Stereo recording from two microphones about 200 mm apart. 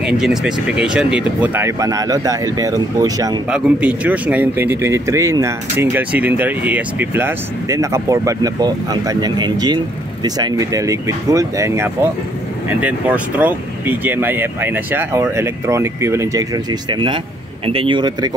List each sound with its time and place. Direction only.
0.0 s speech: 5° right (ahead or behind); by 3.3 s 20° right (ahead or behind)
3.4 s speech: 5° right (ahead or behind); by 18.3 s 20° right (ahead or behind)